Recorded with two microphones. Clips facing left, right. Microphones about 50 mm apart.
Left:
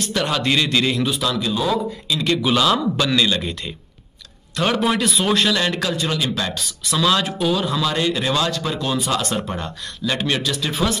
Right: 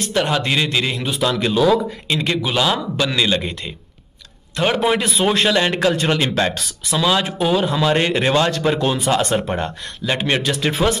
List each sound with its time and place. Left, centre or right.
0.1 s a man's voice: centre
1.0 s speech: right
2.1 s speech: right
2.5 s a man's voice: centre; by 5.9 s right
5.9 s speech: right
6.9 s speech: centre; by 11.0 s right